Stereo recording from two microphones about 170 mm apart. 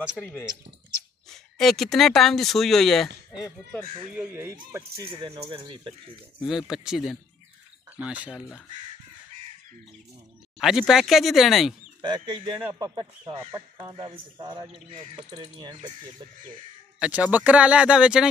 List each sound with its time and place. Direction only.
0.2 s speech: 10° left (ahead or behind)
4.2 s speech: 15° right (ahead or behind)
5.0 s a man's voice: 25° right (ahead or behind)
6.4 s speech: centre (ahead or behind)
10.6 s speech: centre (ahead or behind)
12.0 s a man's voice: 25° right (ahead or behind)
15.2 s a man's voice: 25° right (ahead or behind)
17.0 s speech: 10° right (ahead or behind)